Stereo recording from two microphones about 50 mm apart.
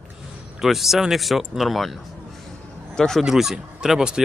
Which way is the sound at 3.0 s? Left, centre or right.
Centre.